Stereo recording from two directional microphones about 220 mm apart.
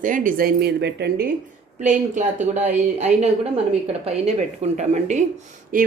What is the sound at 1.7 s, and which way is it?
A woman's voice, 35° right (ahead or behind).